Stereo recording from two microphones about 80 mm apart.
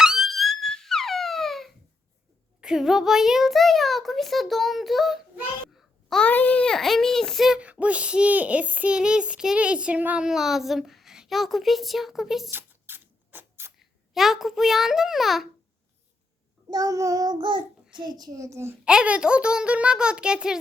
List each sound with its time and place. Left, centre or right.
0.0 s a sound: centre
2.6 s a child's voice: centre
6.1 s a child's voice: centre
7.6 s a child's voice: centre
10.2 s a child's voice: centre
12.5 s a sound: right
13.7 s a child's voice: centre
16.6 s child singing: right
17.9 s a child's voice: right
18.3 s a child's voice: right
18.9 s a child's voice: centre